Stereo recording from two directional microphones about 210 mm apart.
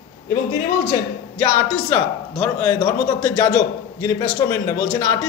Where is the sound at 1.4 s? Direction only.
10° left (ahead or behind).